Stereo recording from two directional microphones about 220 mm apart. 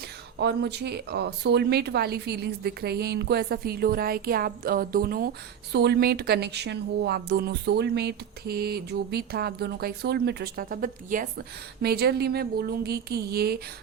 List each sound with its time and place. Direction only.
0.3 s speech: 50° right (ahead or behind)